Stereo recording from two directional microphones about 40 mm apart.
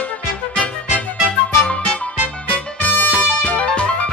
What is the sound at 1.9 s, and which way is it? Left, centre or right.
Music, left.